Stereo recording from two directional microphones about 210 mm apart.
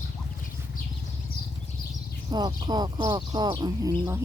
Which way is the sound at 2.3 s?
20° right (ahead or behind).